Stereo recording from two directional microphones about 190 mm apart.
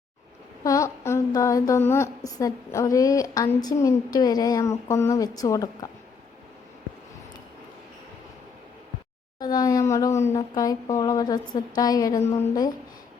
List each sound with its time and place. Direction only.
0.6 s a woman's voice: 15° left (ahead or behind)
9.4 s speech: 20° left (ahead or behind)